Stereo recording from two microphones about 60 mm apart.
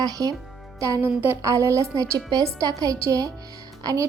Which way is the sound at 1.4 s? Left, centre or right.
Right.